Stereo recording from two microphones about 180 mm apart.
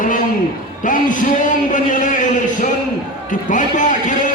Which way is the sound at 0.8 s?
45° left (ahead or behind).